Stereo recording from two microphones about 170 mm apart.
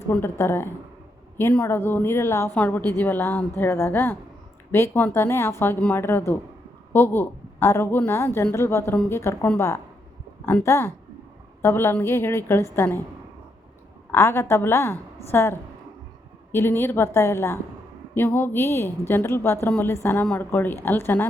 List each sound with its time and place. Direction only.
0.1 s a woman's voice: 15° left (ahead or behind)
14.1 s a woman's voice: 15° left (ahead or behind)